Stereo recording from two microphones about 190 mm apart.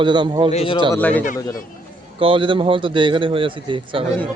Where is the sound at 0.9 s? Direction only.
10° left (ahead or behind).